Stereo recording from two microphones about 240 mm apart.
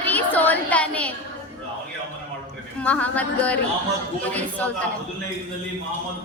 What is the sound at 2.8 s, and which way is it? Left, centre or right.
Female singing, centre.